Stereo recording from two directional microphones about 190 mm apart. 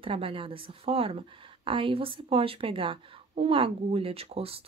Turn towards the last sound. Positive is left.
turn(degrees=-30)  # may be behind; listen again after turning